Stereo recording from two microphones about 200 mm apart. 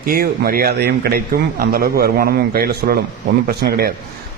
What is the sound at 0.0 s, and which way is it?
A man's voice, 50° right (ahead or behind).